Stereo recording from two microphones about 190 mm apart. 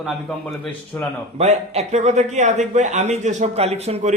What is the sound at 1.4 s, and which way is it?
A man's voice, 35° right (ahead or behind).